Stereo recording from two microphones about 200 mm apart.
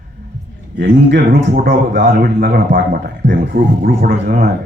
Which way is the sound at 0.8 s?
50° right (ahead or behind).